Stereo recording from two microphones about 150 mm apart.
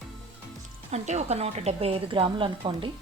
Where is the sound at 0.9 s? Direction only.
50° right (ahead or behind).